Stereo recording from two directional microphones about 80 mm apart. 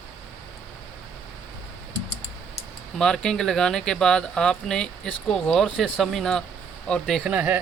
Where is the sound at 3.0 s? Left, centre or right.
Centre.